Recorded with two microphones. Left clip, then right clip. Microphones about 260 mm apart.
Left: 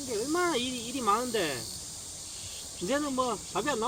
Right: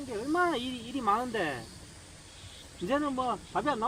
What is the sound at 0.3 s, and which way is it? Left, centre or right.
Speech, centre.